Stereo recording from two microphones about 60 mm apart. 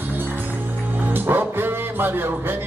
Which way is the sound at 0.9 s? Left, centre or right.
Right.